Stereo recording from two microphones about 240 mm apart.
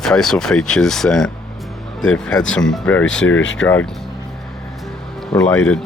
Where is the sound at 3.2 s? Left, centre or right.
Left.